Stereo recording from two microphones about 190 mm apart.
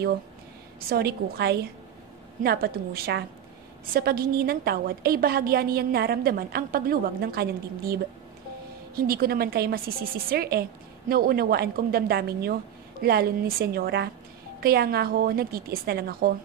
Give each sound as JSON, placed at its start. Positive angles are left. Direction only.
{"t": 0.7, "sound": "a woman's voice", "side_deg": -55}